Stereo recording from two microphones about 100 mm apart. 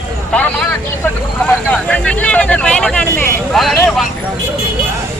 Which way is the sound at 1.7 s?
15° left (ahead or behind).